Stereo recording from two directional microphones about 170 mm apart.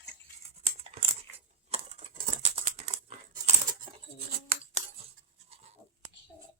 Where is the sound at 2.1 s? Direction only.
50° right (ahead or behind).